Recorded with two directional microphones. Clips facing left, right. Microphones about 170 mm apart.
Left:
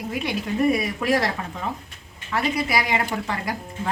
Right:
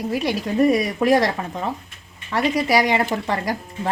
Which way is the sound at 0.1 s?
40° right (ahead or behind).